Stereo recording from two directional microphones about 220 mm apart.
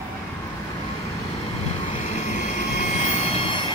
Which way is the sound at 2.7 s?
30° left (ahead or behind).